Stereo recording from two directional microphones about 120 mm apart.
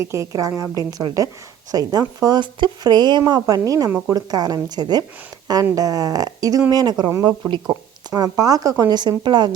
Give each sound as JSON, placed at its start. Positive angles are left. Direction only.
{"t": 0.0, "sound": "a woman's voice", "side_deg": -25}
{"t": 7.7, "sound": "speech", "side_deg": -30}